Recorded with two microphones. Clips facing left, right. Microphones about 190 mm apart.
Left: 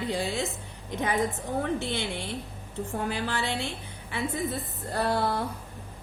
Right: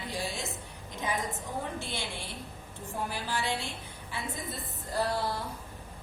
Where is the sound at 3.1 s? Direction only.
65° left (ahead or behind).